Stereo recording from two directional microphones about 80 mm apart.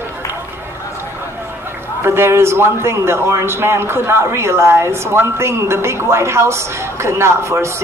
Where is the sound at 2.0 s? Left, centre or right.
Right.